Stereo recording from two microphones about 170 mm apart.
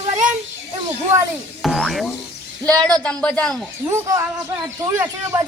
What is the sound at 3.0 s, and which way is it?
Speech, 5° left (ahead or behind).